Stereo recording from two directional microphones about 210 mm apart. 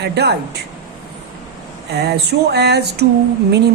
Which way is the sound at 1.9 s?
50° right (ahead or behind).